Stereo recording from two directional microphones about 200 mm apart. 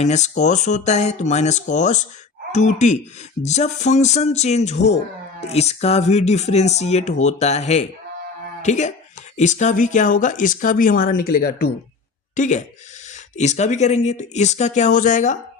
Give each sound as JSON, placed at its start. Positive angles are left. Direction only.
{"t": 0.0, "sound": "speech", "side_deg": 35}
{"t": 12.4, "sound": "speech", "side_deg": 35}